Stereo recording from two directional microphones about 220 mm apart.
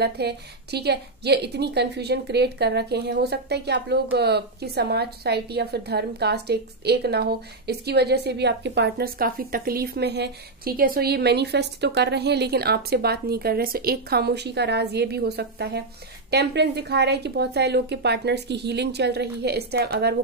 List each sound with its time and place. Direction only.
0.0 s a woman's voice: 50° right (ahead or behind)